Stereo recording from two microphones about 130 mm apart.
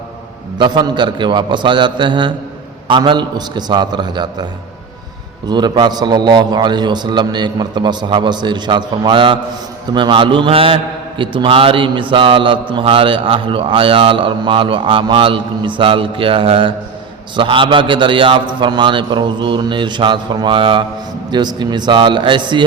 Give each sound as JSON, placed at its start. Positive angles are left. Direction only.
{"t": 0.6, "sound": "a man's voice", "side_deg": -35}
{"t": 5.5, "sound": "a man's voice", "side_deg": -35}